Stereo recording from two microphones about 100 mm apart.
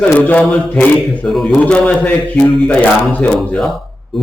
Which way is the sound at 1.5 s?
10° left (ahead or behind).